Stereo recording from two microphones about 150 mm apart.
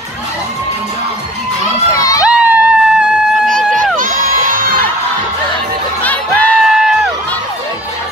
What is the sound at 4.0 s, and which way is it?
Crowd, 60° right (ahead or behind).